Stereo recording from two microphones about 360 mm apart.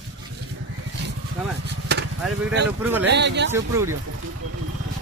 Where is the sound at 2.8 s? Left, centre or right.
Centre.